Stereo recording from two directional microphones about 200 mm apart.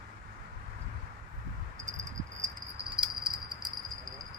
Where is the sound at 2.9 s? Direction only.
25° right (ahead or behind).